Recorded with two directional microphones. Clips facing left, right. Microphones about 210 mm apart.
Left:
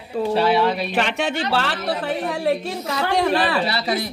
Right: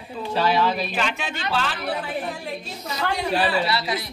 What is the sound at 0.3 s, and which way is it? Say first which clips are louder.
A woman's voice: left 3 dB; 65° left (ahead or behind).